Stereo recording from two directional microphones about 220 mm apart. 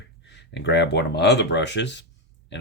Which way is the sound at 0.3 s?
50° left (ahead or behind).